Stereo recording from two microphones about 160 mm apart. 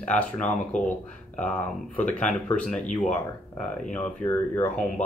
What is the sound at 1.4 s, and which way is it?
Speech, 10° left (ahead or behind).